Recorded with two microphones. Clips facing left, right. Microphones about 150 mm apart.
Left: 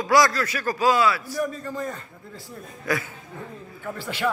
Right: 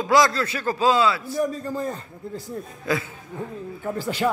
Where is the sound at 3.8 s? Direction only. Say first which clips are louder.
Right 5 dB; 40° right (ahead or behind).